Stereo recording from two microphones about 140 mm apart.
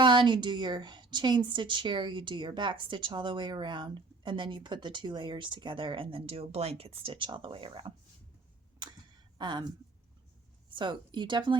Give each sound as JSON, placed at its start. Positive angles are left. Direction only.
{"t": 0.0, "sound": "speech", "side_deg": -35}
{"t": 8.8, "sound": "a sound", "side_deg": -30}
{"t": 9.4, "sound": "speech", "side_deg": -30}
{"t": 10.8, "sound": "speech", "side_deg": -35}